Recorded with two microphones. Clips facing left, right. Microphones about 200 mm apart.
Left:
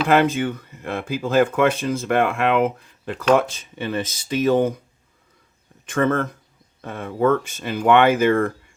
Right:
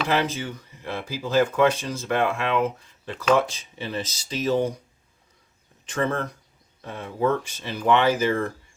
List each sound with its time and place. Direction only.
0.1 s speech: 55° left (ahead or behind)
5.8 s speech: 50° left (ahead or behind)